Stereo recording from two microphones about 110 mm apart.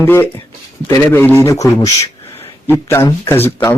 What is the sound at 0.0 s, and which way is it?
Speech, 20° left (ahead or behind).